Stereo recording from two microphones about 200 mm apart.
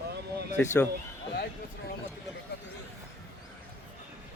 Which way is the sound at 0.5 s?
15° left (ahead or behind).